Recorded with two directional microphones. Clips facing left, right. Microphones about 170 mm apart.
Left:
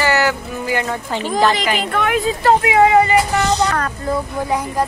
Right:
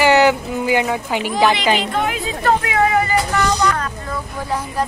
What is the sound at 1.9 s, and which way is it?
Speech, 65° left (ahead or behind).